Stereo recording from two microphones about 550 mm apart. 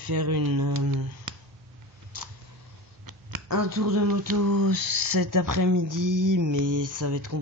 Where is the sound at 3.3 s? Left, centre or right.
Right.